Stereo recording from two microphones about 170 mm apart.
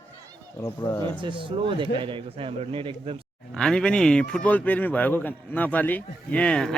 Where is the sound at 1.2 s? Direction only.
30° right (ahead or behind).